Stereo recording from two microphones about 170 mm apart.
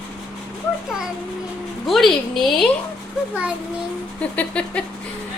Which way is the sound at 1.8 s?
Centre (ahead or behind).